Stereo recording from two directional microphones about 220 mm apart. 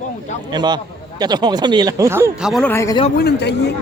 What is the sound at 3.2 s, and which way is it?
Speech, 50° left (ahead or behind).